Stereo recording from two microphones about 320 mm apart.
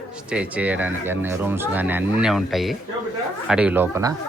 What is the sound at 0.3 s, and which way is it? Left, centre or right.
Speech, centre.